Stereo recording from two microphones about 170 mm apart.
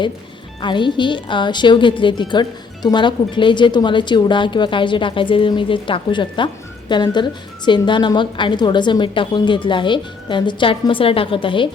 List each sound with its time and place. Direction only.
0.6 s a woman's voice: 30° left (ahead or behind)